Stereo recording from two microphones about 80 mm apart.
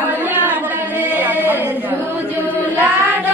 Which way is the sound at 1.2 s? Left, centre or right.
Right.